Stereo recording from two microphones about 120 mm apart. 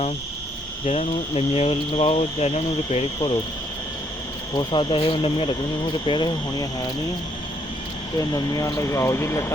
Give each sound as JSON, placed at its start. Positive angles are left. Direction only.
{"t": 0.9, "sound": "speech", "side_deg": 55}
{"t": 4.5, "sound": "speech", "side_deg": 40}
{"t": 8.2, "sound": "speech", "side_deg": 30}